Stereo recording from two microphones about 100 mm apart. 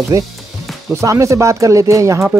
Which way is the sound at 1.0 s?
30° right (ahead or behind).